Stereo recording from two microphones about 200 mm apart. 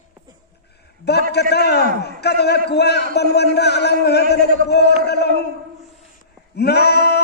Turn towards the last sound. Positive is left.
turn(degrees=55)  # may be behind; listen again after turning